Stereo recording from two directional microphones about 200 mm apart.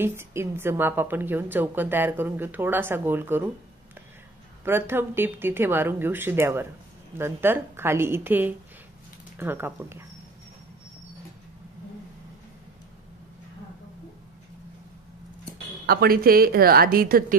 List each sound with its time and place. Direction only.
0.0 s a woman's voice: 10° right (ahead or behind)
4.6 s a woman's voice: 10° right (ahead or behind)
15.9 s a woman's voice: 50° right (ahead or behind)